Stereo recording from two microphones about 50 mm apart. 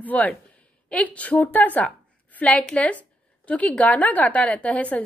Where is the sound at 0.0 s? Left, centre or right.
Left.